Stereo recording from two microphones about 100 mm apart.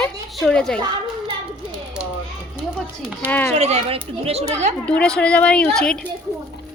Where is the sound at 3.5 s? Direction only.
90° right.